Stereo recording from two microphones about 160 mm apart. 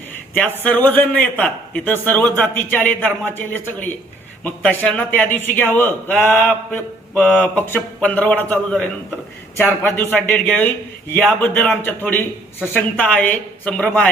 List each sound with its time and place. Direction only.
0.3 s a man's voice: 10° left (ahead or behind)